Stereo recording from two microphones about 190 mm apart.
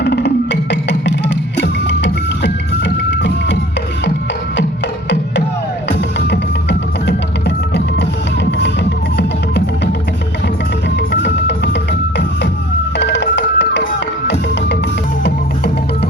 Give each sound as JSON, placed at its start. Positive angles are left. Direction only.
{"t": 0.0, "sound": "music", "side_deg": 65}
{"t": 5.9, "sound": "music", "side_deg": 60}
{"t": 10.9, "sound": "music", "side_deg": 65}